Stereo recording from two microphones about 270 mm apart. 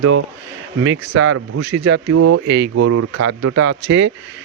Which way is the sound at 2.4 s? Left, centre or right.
Right.